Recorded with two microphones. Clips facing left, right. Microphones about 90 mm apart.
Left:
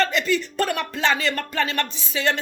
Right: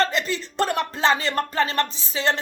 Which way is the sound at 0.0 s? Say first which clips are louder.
Left 2 dB; 35° right (ahead or behind).